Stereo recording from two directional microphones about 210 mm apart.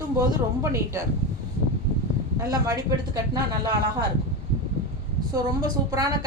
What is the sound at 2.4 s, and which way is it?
Speech, 15° right (ahead or behind).